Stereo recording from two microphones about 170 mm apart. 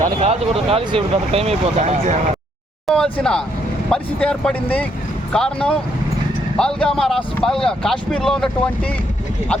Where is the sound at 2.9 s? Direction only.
5° left (ahead or behind).